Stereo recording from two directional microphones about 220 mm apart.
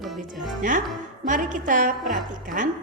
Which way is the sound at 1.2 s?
35° right (ahead or behind).